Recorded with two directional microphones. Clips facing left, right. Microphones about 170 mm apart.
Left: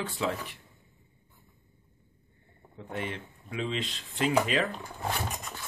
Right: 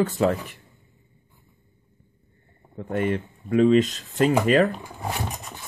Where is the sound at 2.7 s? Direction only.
50° right (ahead or behind).